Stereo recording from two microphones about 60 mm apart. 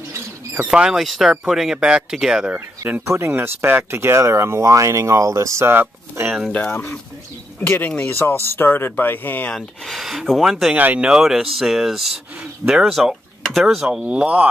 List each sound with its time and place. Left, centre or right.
0.7 s speech: centre
0.9 s speech: centre
3.3 s speech: right
5.7 s speech: right
6.7 s speech: left
9.6 s speech: centre
10.7 s speech: right
11.1 s speech: centre
13.7 s speech: centre